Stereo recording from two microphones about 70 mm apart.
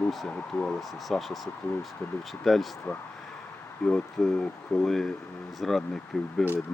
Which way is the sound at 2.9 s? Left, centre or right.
Left.